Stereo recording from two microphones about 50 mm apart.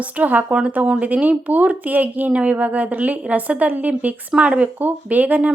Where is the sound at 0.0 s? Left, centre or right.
Right.